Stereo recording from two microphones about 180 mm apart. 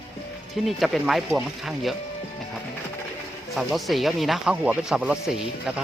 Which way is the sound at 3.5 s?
Centre (ahead or behind).